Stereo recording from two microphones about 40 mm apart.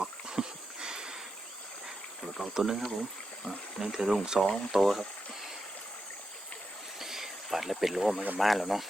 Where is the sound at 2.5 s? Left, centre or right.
Centre.